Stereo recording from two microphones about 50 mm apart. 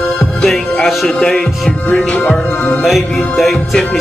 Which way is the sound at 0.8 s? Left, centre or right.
Centre.